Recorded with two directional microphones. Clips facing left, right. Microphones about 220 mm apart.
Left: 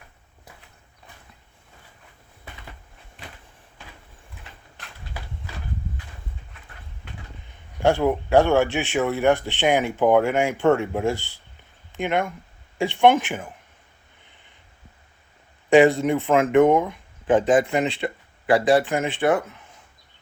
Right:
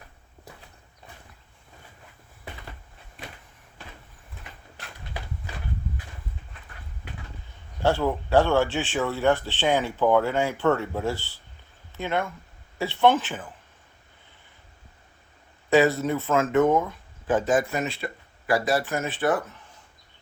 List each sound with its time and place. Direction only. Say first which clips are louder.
7.8 s speech: left 4 dB; 10° left (ahead or behind)
16.0 s speech: left 4 dB; 15° left (ahead or behind)